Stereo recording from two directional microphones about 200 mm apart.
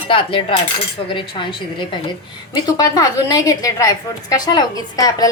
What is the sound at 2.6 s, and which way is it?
A woman's voice, 20° left (ahead or behind).